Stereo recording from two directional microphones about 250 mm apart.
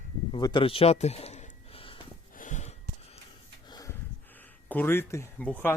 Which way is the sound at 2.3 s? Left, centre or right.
Left.